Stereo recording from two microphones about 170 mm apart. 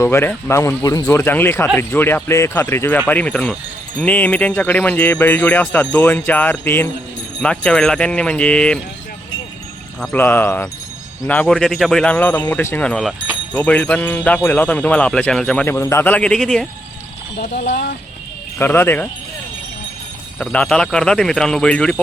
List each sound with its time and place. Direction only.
0.0 s speech: 15° left (ahead or behind)
10.0 s speech: 10° left (ahead or behind)
18.6 s speech: 10° left (ahead or behind)
20.4 s speech: 5° left (ahead or behind)